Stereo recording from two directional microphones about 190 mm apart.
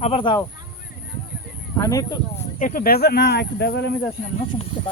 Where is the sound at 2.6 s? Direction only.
45° left (ahead or behind).